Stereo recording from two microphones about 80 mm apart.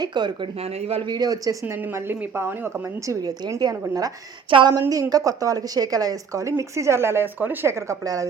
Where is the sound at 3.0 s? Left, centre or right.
Right.